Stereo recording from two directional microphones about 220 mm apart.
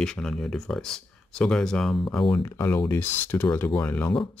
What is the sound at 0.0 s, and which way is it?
Speech, 5° left (ahead or behind).